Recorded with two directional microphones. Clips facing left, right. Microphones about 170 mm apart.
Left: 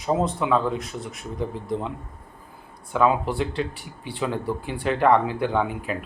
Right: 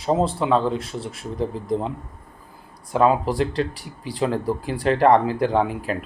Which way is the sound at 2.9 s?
35° right (ahead or behind).